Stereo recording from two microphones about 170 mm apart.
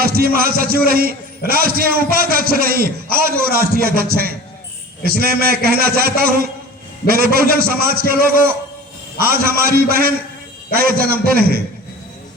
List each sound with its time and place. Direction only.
0.0 s a man's voice: 60° right (ahead or behind)